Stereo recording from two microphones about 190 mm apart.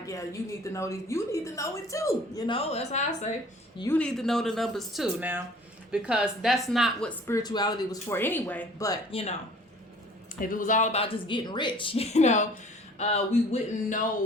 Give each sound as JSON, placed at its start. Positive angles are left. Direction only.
{"t": 0.0, "sound": "a woman's voice", "side_deg": 15}
{"t": 2.6, "sound": "speech", "side_deg": 35}
{"t": 3.8, "sound": "speech", "side_deg": 5}
{"t": 7.3, "sound": "a woman's voice", "side_deg": 20}
{"t": 10.5, "sound": "speech", "side_deg": 45}